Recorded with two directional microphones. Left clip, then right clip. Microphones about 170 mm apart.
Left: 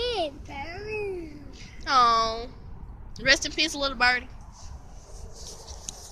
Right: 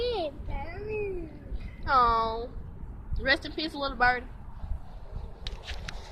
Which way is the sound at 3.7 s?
50° left (ahead or behind).